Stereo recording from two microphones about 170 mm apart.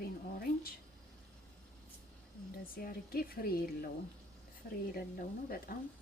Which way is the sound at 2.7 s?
60° left (ahead or behind).